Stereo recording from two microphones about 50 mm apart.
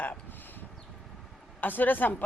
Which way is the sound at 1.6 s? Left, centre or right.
Left.